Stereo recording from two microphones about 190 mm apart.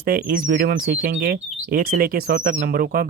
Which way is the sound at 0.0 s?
50° right (ahead or behind).